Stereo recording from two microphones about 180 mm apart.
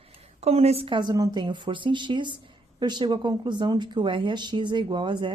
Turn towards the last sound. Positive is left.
turn(degrees=-25)  # may be behind; listen again after turning